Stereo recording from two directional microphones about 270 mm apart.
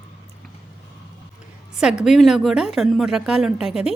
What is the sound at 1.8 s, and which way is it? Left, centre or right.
A woman's voice, centre.